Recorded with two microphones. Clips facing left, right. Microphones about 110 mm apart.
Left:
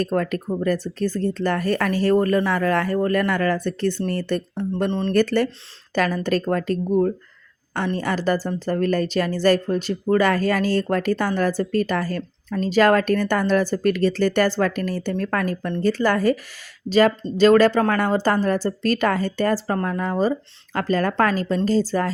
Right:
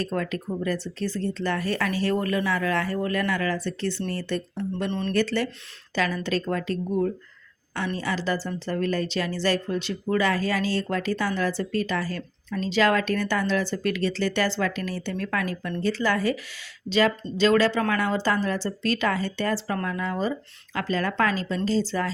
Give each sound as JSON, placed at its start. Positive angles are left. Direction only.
{"t": 0.0, "sound": "a woman's voice", "side_deg": 50}
{"t": 4.9, "sound": "speech", "side_deg": 30}
{"t": 5.1, "sound": "a woman's voice", "side_deg": 50}